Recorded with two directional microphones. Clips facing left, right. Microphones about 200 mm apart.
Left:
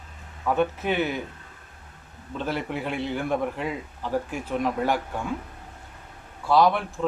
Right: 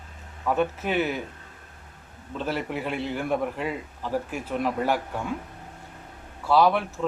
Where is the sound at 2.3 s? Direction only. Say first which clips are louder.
Even; 5° right (ahead or behind).